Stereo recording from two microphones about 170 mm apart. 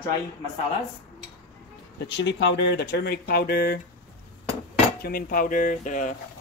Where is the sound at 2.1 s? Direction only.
90° left; by 3.8 s 65° left (ahead or behind).